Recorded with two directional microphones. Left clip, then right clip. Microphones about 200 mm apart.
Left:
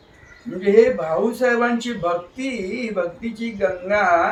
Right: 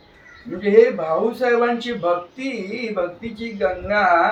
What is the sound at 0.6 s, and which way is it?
A man's voice, 5° left (ahead or behind).